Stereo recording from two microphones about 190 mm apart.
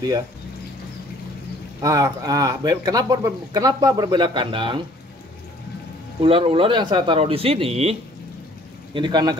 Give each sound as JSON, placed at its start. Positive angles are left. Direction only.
{"t": 1.8, "sound": "speech", "side_deg": -20}
{"t": 6.2, "sound": "speech", "side_deg": -30}